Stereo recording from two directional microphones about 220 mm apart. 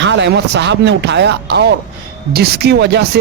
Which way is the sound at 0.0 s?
55° right (ahead or behind).